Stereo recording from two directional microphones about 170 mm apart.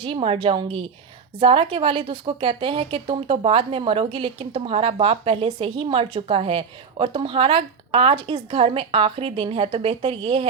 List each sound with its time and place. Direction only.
0.0 s a woman's voice: 35° right (ahead or behind)